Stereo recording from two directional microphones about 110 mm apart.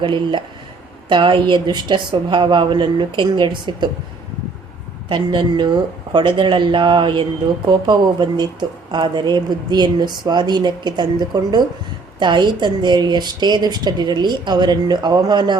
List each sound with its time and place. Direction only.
0.0 s a woman's voice: 45° right (ahead or behind)
5.0 s a woman's voice: 45° right (ahead or behind)